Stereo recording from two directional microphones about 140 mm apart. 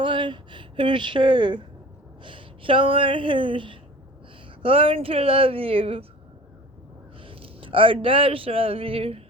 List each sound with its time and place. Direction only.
0.0 s speech: 35° right (ahead or behind)
7.2 s a man's voice: 40° right (ahead or behind)